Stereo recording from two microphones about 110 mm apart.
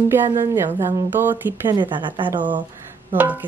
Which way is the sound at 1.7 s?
45° right (ahead or behind).